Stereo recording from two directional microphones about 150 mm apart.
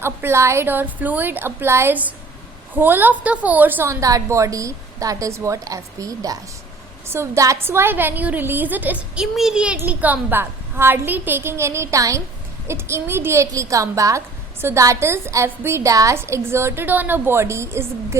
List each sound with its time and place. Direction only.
0.0 s a woman's voice: 15° right (ahead or behind)